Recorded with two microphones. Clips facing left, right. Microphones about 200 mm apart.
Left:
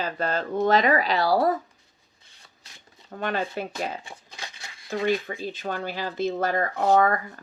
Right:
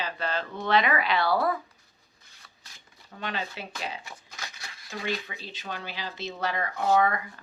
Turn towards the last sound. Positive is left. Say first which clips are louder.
# left 3 dB
turn(degrees=45)  # may be behind; listen again after turning